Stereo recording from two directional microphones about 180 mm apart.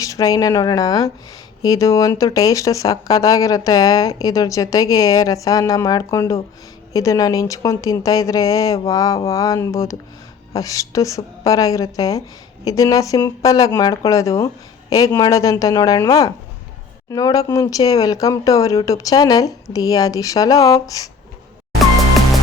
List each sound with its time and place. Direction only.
0.0 s speech: 20° left (ahead or behind)